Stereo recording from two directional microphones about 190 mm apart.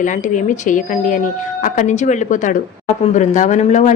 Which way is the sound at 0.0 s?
40° left (ahead or behind).